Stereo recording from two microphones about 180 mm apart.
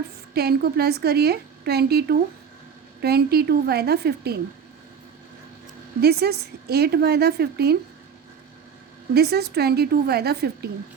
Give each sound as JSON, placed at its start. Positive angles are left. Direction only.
{"t": 0.3, "sound": "a woman's voice", "side_deg": -60}
{"t": 6.0, "sound": "a woman's voice", "side_deg": -60}
{"t": 9.1, "sound": "a woman's voice", "side_deg": -60}